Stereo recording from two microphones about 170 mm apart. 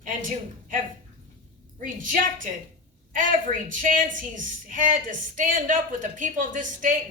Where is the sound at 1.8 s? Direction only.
50° right (ahead or behind).